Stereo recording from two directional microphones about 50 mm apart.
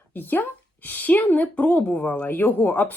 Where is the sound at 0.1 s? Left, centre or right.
Left.